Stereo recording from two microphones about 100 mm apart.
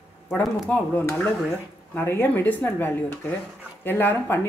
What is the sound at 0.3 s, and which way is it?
Speech, 15° left (ahead or behind).